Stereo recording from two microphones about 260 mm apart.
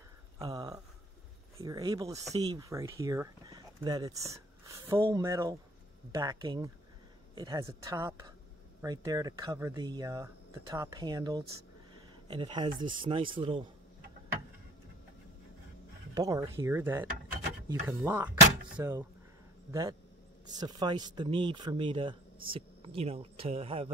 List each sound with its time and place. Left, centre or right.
0.4 s a sound: centre
1.6 s a man's voice: centre
16.2 s speech: centre